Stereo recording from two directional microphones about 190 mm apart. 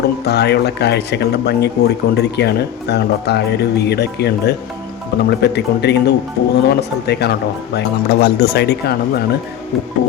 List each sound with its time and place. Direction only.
0.3 s speech: 60° left (ahead or behind)